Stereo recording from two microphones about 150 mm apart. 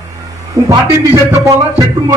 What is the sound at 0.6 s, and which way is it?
Speech, 20° right (ahead or behind).